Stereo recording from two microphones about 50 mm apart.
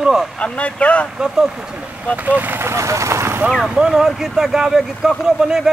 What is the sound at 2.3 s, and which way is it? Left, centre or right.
Speech, right.